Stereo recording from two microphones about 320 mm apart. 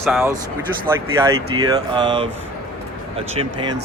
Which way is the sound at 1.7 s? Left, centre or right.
Centre.